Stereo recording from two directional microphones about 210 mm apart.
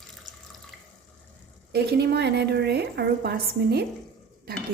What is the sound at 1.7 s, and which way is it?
A woman's voice, 50° right (ahead or behind).